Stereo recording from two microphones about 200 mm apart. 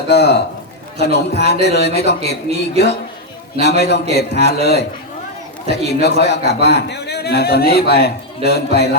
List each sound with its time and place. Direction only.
0.1 s a man's voice: 55° left (ahead or behind)